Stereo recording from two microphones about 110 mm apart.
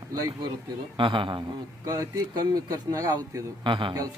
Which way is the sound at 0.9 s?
50° right (ahead or behind).